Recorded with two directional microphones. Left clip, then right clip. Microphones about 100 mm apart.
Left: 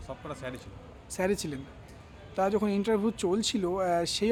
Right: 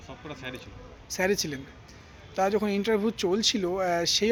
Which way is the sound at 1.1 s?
5° left (ahead or behind).